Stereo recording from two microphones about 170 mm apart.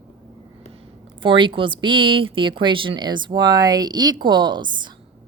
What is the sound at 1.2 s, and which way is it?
Speech, 30° right (ahead or behind).